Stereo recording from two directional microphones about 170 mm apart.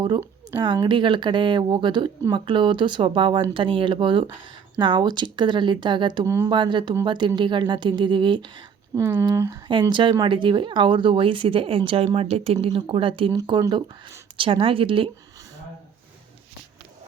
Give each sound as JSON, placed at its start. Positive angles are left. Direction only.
{"t": 0.5, "sound": "speech", "side_deg": -25}